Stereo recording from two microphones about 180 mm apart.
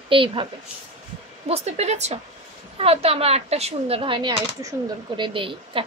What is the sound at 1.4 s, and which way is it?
Speech, 35° right (ahead or behind).